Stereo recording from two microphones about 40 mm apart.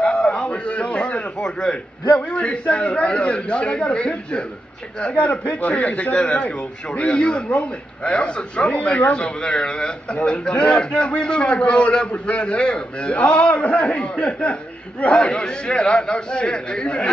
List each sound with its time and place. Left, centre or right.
0.0 s a sound: left
2.2 s a man's voice: left
7.4 s a man's voice: left
8.0 s a man's voice: left